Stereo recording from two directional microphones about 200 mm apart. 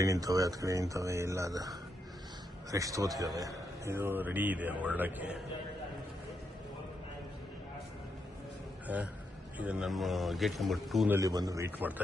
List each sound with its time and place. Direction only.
0.0 s a man's voice: 15° right (ahead or behind)
8.9 s a man's voice: 10° right (ahead or behind)
11.2 s a man's voice: 20° right (ahead or behind)